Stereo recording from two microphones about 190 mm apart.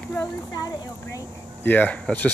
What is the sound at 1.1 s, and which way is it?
Speech, 10° left (ahead or behind).